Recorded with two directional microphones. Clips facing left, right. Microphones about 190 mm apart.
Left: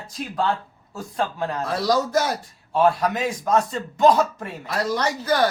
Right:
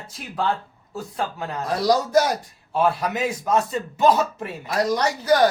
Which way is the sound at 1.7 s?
15° right (ahead or behind).